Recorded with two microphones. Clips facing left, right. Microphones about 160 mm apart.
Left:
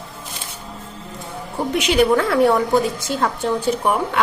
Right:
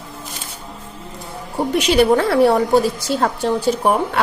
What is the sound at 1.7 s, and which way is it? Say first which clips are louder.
A woman's voice: right 2 dB; 35° right (ahead or behind).